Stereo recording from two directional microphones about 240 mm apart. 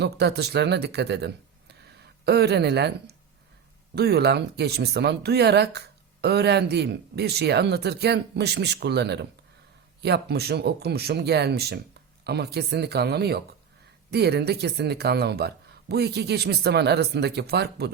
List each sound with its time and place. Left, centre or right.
0.0 s speech: right